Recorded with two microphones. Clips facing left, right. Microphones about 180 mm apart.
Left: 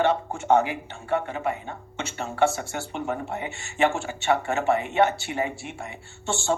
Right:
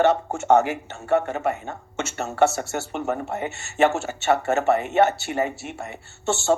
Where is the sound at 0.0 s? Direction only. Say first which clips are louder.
Right 4 dB; 45° right (ahead or behind).